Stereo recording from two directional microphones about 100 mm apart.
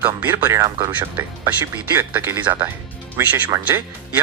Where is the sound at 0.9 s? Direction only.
15° right (ahead or behind).